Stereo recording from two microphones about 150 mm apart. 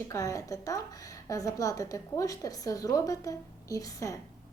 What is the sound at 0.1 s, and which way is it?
A woman's voice, 20° left (ahead or behind).